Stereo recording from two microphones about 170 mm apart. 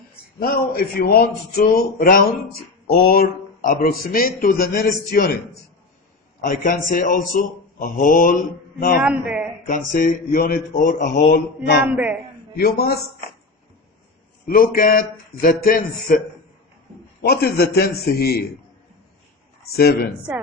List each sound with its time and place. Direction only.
0.3 s a man's voice: 60° left (ahead or behind)
6.4 s a man's voice: 55° left (ahead or behind)
9.0 s a man's voice: 5° right (ahead or behind)
9.6 s a man's voice: 55° left (ahead or behind)
14.4 s a man's voice: 55° left (ahead or behind)
17.2 s a man's voice: 70° left (ahead or behind)
19.7 s a man's voice: 70° left (ahead or behind)